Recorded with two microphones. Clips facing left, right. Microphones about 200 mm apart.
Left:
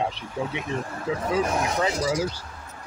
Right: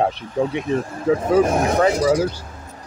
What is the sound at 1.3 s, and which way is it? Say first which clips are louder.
Speech: right 8 dB; 50° right (ahead or behind).